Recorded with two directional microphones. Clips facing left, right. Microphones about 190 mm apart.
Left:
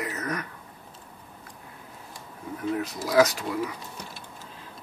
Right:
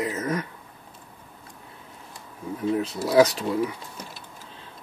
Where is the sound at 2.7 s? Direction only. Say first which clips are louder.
Right 3 dB; 30° right (ahead or behind).